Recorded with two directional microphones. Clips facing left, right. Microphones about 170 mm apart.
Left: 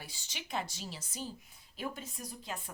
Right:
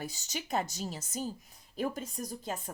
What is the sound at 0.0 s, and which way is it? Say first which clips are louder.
A woman's voice: right 9 dB; 45° right (ahead or behind).